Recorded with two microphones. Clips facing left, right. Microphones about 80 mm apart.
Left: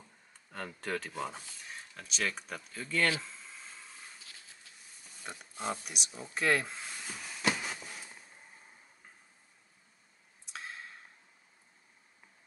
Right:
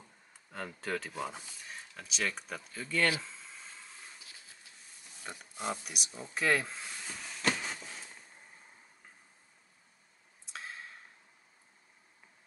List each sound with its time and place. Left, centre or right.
0.3 s speech: centre
5.2 s a sound: centre
10.5 s clicking: centre